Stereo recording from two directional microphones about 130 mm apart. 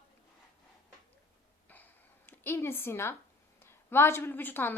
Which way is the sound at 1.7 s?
15° left (ahead or behind).